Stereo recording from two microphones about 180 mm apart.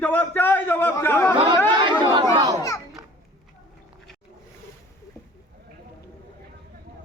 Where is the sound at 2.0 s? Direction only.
25° right (ahead or behind).